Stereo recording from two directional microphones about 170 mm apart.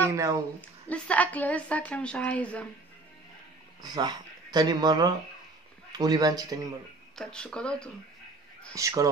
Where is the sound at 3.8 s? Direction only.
25° right (ahead or behind).